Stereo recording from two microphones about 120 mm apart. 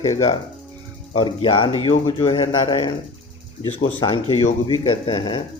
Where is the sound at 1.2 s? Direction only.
45° left (ahead or behind).